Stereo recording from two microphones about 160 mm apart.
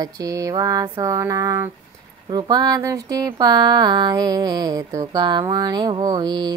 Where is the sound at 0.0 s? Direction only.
20° right (ahead or behind).